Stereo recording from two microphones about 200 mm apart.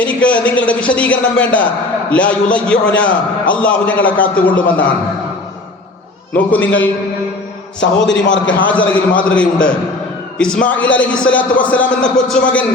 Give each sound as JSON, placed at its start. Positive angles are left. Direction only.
{"t": 0.0, "sound": "speech", "side_deg": 5}
{"t": 6.3, "sound": "speech", "side_deg": 10}
{"t": 7.8, "sound": "a man's voice", "side_deg": 65}
{"t": 8.7, "sound": "a man's voice", "side_deg": 5}